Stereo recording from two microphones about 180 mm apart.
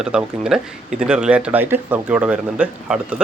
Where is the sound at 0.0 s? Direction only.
5° right (ahead or behind).